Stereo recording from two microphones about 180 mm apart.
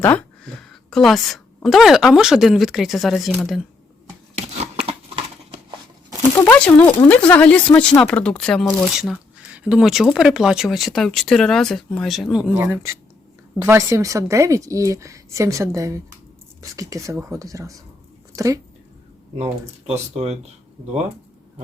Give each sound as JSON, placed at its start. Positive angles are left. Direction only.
{"t": 0.0, "sound": "a woman's voice", "side_deg": 10}
{"t": 4.9, "sound": "a sound", "side_deg": -35}
{"t": 6.4, "sound": "a woman's voice", "side_deg": 10}
{"t": 19.9, "sound": "speech", "side_deg": -35}